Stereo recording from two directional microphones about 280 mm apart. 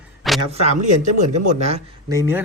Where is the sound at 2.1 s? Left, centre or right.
Centre.